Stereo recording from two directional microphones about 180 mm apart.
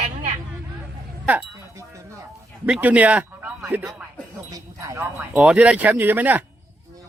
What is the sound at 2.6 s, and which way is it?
Speech, 10° right (ahead or behind).